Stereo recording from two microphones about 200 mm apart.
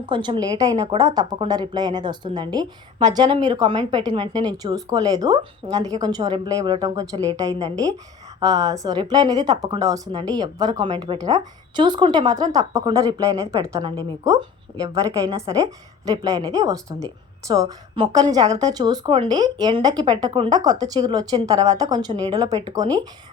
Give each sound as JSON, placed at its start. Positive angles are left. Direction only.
{"t": 0.0, "sound": "a woman's voice", "side_deg": -25}
{"t": 15.6, "sound": "a woman's voice", "side_deg": -20}